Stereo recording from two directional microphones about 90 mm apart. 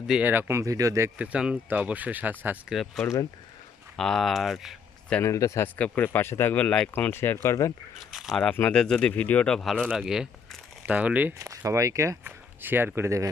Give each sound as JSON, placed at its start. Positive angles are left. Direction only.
{"t": 0.3, "sound": "speech", "side_deg": -25}
{"t": 0.6, "sound": "speech", "side_deg": -40}
{"t": 1.2, "sound": "speech", "side_deg": -10}
{"t": 2.6, "sound": "speech", "side_deg": 0}
{"t": 5.2, "sound": "speech", "side_deg": 35}
{"t": 5.6, "sound": "speech", "side_deg": 20}
{"t": 6.7, "sound": "speech", "side_deg": 10}
{"t": 6.9, "sound": "speech", "side_deg": 25}
{"t": 7.4, "sound": "speech", "side_deg": 35}
{"t": 8.4, "sound": "speech", "side_deg": 15}
{"t": 10.1, "sound": "speech", "side_deg": -5}
{"t": 10.8, "sound": "speech", "side_deg": -15}
{"t": 11.3, "sound": "speech", "side_deg": -35}
{"t": 12.2, "sound": "speech", "side_deg": -20}